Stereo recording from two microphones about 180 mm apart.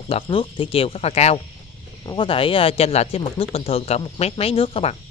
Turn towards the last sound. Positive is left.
turn(degrees=30)  # may be behind; listen again after turning